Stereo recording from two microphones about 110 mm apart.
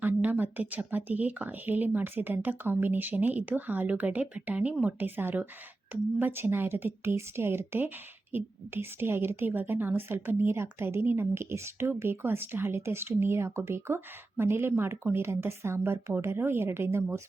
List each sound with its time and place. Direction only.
0.0 s a woman's voice: 15° right (ahead or behind)